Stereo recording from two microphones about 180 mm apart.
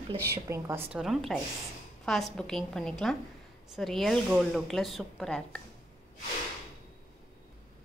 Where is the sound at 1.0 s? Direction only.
Centre (ahead or behind).